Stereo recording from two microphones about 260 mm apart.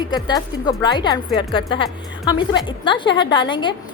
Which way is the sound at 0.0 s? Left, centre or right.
Centre.